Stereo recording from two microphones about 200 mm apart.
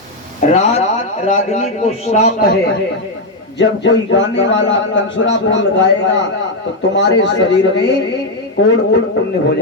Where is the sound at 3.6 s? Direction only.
65° left (ahead or behind).